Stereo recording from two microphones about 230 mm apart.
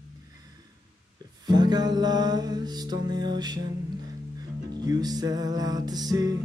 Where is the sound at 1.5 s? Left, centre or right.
Centre.